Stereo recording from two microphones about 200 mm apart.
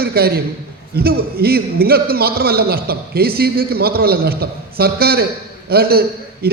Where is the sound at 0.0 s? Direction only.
50° right (ahead or behind).